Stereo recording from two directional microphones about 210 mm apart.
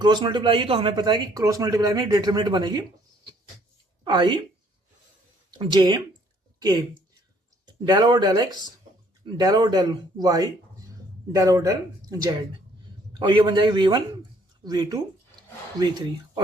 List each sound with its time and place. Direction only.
0.0 s speech: 20° right (ahead or behind)
4.0 s speech: 20° right (ahead or behind)
5.5 s speech: 20° right (ahead or behind)
7.9 s speech: 20° right (ahead or behind)